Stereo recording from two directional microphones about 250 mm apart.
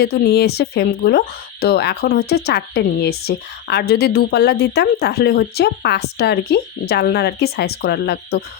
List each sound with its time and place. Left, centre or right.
0.0 s speech: left